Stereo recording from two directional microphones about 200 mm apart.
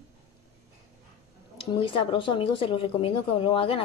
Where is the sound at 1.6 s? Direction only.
25° left (ahead or behind).